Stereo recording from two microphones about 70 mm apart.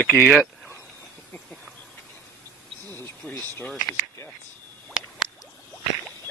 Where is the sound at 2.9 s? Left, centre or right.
Left.